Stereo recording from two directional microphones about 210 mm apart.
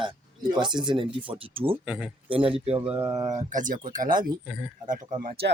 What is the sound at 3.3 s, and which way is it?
Speech, 40° right (ahead or behind).